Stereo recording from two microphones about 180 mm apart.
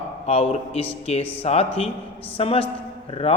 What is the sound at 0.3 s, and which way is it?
A man's voice, 35° left (ahead or behind).